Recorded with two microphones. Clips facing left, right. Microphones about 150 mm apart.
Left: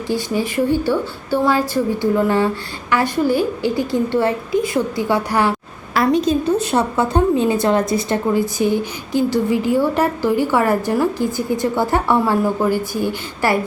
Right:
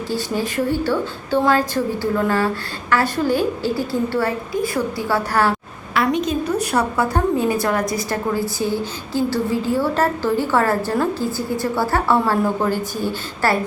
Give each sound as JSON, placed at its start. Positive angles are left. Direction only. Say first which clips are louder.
{"t": 0.1, "sound": "a woman's voice", "louder": "left 4 dB", "side_deg": 15}
{"t": 5.9, "sound": "a woman's voice", "louder": "left 4 dB", "side_deg": 35}